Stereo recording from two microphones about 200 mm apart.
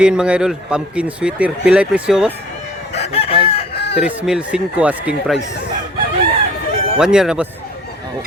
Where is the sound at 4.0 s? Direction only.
5° right (ahead or behind).